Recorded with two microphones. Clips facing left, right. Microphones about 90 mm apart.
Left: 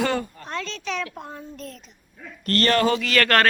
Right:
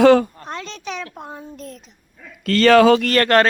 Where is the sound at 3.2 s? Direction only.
20° right (ahead or behind).